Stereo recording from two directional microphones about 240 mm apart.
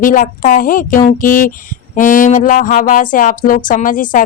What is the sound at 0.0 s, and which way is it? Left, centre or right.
Music, left.